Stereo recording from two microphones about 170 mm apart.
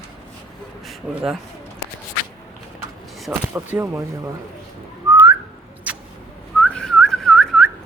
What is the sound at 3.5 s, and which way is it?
Speech, 15° right (ahead or behind).